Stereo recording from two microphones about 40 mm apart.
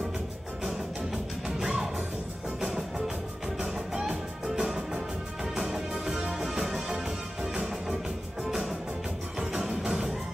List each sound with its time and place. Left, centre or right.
0.7 s music: centre
3.6 s music: centre
9.4 s music: centre